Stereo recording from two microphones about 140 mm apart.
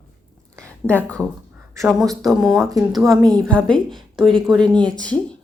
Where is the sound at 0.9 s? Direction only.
10° left (ahead or behind).